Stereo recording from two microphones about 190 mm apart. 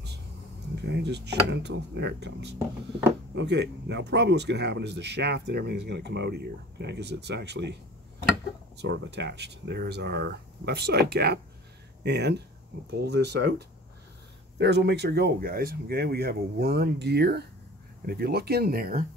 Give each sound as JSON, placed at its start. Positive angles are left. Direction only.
{"t": 0.8, "sound": "speech", "side_deg": -65}